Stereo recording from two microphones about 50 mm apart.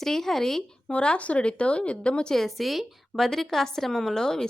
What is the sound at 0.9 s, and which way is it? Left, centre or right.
A woman's voice, left.